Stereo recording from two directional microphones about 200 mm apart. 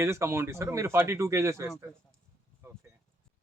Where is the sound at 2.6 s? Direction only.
15° right (ahead or behind).